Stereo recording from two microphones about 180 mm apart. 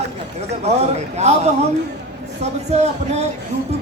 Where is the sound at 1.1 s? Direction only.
40° right (ahead or behind).